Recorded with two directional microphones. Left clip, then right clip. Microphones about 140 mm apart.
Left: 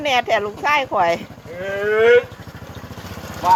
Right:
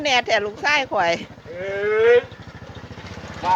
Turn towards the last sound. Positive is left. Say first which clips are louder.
# left 3 dB
turn(degrees=15)  # may be behind; listen again after turning